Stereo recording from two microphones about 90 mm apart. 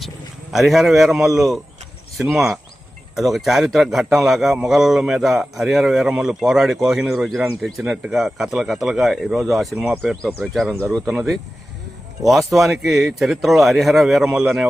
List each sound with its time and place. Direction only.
0.5 s a man's voice: centre (ahead or behind)
9.7 s speech: 20° right (ahead or behind)
10.4 s a man's voice: centre (ahead or behind)